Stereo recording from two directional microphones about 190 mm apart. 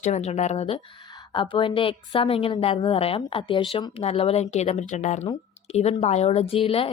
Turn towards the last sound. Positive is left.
turn(degrees=30)  # may be behind; listen again after turning